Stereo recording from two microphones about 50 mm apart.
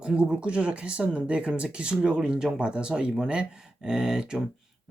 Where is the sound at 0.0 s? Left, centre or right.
Centre.